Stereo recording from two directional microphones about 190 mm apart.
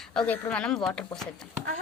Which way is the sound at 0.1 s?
5° left (ahead or behind).